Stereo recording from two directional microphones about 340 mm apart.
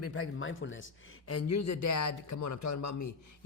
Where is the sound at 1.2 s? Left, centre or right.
Left.